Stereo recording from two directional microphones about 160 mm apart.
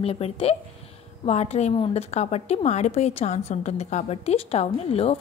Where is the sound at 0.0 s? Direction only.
35° left (ahead or behind).